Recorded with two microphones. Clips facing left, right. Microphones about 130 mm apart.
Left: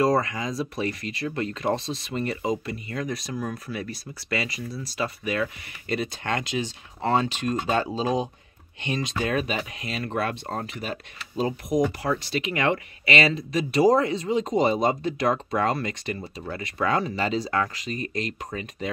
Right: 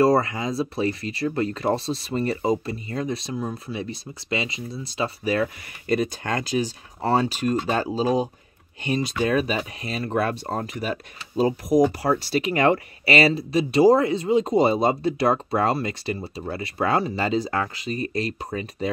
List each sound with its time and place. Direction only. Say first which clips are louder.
0.0 s speech: right 3 dB; 30° right (ahead or behind)
9.2 s speech: right 4 dB; 35° right (ahead or behind)